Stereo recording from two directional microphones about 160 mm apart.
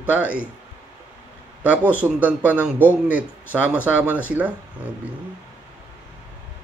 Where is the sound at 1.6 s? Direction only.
10° right (ahead or behind).